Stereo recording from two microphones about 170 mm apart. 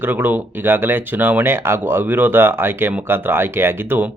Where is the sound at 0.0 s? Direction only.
10° right (ahead or behind).